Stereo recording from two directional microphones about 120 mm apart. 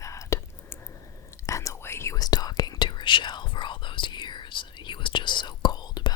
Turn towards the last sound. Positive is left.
turn(degrees=35)  # may be behind; listen again after turning